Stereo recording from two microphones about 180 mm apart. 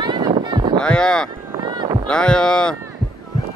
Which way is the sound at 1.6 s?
25° right (ahead or behind).